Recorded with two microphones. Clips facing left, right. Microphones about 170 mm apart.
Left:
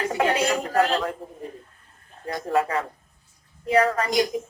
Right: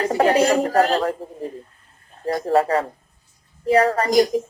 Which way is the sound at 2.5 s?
35° right (ahead or behind).